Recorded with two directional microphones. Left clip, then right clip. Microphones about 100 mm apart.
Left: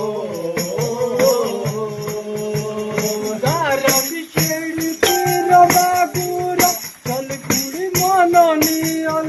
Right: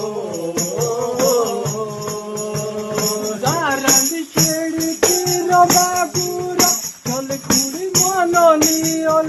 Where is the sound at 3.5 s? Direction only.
30° right (ahead or behind).